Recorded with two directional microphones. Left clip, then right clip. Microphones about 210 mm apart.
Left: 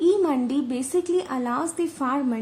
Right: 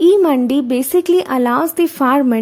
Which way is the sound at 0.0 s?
45° right (ahead or behind).